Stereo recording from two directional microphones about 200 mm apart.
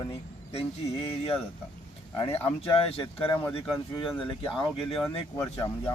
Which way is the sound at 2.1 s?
25° left (ahead or behind).